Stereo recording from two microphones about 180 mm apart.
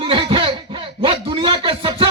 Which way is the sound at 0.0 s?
25° right (ahead or behind).